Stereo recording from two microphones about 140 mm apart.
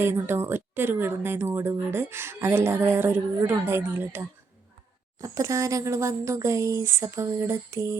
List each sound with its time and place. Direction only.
0.0 s a woman's voice: 15° right (ahead or behind)
5.2 s speech: 20° right (ahead or behind)